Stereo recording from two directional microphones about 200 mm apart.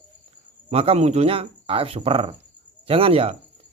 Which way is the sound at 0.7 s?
30° right (ahead or behind).